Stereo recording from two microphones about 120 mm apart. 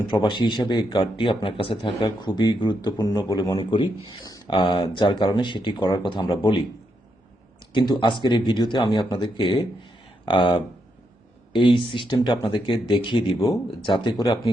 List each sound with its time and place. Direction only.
0.1 s speech: 40° left (ahead or behind)
3.6 s speech: 45° left (ahead or behind)
7.7 s speech: 40° left (ahead or behind)